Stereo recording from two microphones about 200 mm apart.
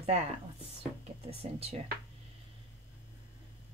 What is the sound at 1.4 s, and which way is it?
Speech, 30° right (ahead or behind).